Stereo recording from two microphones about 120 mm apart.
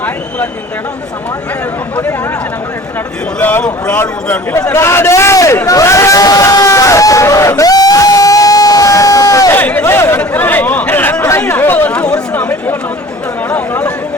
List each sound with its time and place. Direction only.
3.4 s a man's voice: 15° left (ahead or behind)
5.6 s a sound: 25° left (ahead or behind)
9.6 s chatter: 15° left (ahead or behind)
13.5 s speech: 10° left (ahead or behind)